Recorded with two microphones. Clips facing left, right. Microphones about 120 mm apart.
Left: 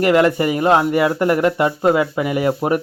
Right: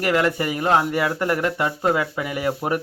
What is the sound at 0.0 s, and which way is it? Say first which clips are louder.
A man's voice: left 6 dB; 20° left (ahead or behind).